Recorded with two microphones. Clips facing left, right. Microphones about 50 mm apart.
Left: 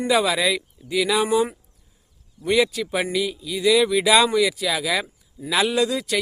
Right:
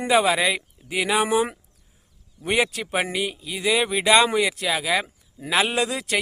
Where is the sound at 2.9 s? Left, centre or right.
Right.